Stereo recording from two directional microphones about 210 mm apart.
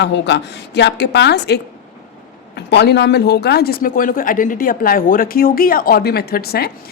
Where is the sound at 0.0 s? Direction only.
55° left (ahead or behind).